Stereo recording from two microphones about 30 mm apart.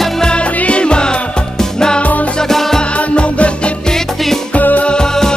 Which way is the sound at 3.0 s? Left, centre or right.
Left.